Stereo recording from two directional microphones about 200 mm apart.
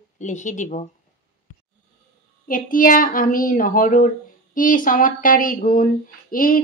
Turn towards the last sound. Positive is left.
turn(degrees=45)  # may be behind; listen again after turning